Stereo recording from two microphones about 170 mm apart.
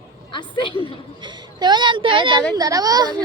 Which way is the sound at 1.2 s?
25° right (ahead or behind).